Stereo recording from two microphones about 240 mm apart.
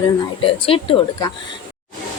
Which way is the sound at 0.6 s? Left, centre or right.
Left.